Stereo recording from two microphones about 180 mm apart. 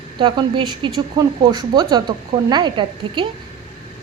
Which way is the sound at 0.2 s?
30° right (ahead or behind).